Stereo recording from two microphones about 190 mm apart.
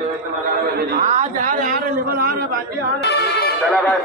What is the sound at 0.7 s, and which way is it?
A man's voice, 40° right (ahead or behind).